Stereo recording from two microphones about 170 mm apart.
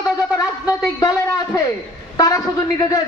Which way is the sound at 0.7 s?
20° left (ahead or behind).